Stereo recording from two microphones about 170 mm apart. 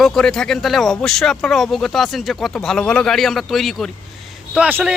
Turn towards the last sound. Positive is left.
turn(degrees=-10)  # may be behind; listen again after turning